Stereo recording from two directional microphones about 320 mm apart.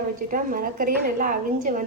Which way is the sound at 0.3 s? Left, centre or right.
Right.